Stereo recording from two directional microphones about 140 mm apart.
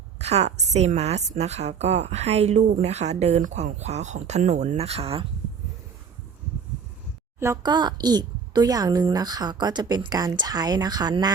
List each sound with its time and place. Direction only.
0.2 s a woman's voice: 50° right (ahead or behind)
7.3 s speech: 20° right (ahead or behind)